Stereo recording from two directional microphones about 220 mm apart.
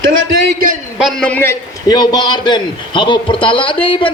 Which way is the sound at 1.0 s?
5° left (ahead or behind).